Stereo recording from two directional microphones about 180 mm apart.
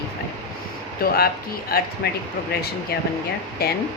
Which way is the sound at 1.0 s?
55° left (ahead or behind).